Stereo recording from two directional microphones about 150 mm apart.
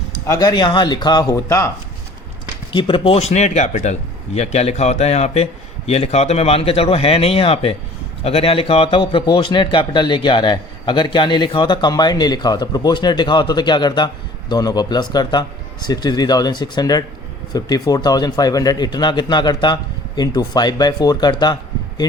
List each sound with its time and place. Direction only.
0.3 s speech: 25° left (ahead or behind)
2.7 s a man's voice: 35° left (ahead or behind)